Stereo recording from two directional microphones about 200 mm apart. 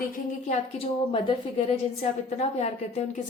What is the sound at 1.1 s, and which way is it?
A woman's voice, 30° left (ahead or behind).